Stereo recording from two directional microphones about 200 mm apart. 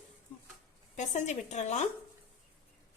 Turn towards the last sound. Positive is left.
turn(degrees=35)  # may be behind; listen again after turning